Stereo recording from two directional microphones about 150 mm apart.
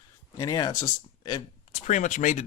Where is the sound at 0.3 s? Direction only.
25° left (ahead or behind).